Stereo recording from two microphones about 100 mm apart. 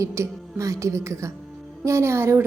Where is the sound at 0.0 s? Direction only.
30° right (ahead or behind).